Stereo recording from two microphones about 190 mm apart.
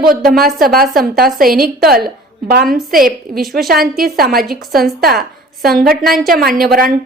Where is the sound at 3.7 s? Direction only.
50° right (ahead or behind).